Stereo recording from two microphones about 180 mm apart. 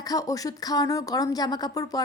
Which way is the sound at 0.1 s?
20° left (ahead or behind).